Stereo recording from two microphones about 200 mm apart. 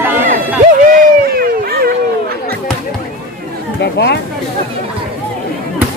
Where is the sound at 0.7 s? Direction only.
45° right (ahead or behind).